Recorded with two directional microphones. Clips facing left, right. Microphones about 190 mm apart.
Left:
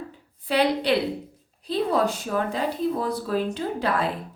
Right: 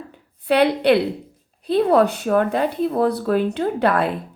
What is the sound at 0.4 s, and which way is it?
Speech, 60° right (ahead or behind).